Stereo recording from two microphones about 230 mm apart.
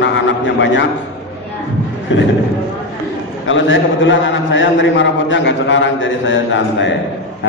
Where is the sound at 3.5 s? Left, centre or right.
Left.